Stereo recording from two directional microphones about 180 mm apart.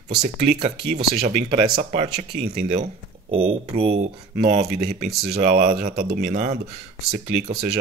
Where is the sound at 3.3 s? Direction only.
35° right (ahead or behind).